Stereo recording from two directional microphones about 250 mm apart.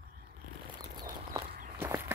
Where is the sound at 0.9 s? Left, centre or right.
Centre.